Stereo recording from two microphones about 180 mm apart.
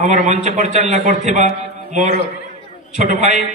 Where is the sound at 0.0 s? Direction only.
45° right (ahead or behind).